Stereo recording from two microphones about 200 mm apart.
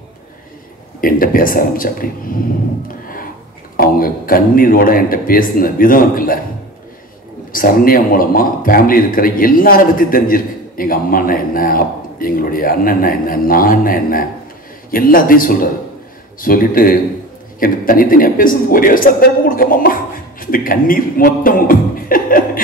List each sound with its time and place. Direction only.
1.0 s a man's voice: 45° left (ahead or behind)
3.7 s a man's voice: 45° left (ahead or behind)
7.5 s a man's voice: 45° left (ahead or behind)